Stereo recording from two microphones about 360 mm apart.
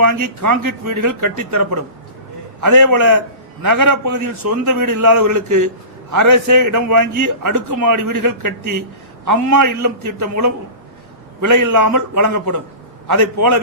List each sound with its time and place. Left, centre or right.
0.0 s a man's voice: right